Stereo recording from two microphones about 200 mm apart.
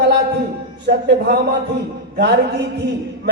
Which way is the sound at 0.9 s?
55° right (ahead or behind).